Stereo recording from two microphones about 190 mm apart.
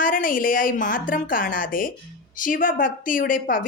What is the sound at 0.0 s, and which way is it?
A woman's voice, 45° left (ahead or behind).